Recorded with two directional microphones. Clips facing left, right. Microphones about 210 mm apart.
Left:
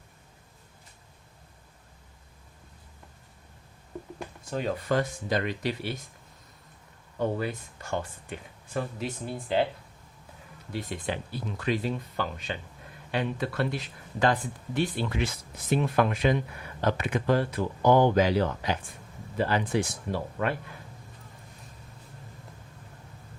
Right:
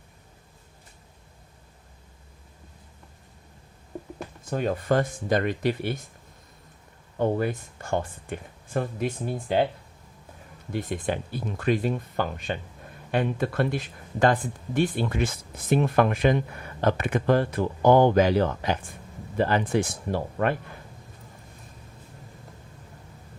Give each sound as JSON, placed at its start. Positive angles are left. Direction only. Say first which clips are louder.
{"t": 4.5, "sound": "speech", "louder": "right 3 dB", "side_deg": -50}
{"t": 7.2, "sound": "speech", "louder": "right 4 dB", "side_deg": -50}
{"t": 10.7, "sound": "speech", "louder": "right 4 dB", "side_deg": -50}